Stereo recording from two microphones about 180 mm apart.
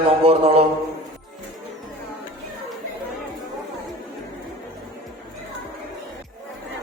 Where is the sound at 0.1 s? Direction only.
35° right (ahead or behind).